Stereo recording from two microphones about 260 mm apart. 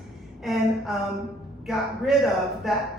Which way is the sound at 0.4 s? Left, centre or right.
Centre.